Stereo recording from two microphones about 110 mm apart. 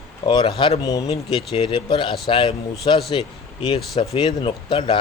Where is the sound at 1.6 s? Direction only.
45° left (ahead or behind).